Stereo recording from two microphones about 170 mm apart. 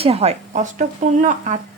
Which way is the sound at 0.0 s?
35° right (ahead or behind).